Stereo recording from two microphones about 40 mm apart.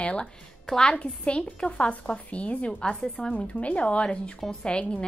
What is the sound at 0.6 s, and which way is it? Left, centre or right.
Speech, centre.